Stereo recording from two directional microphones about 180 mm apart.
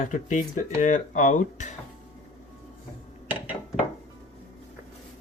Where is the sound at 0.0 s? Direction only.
45° left (ahead or behind).